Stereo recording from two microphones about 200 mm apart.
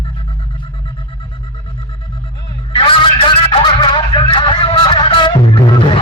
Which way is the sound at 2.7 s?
25° left (ahead or behind).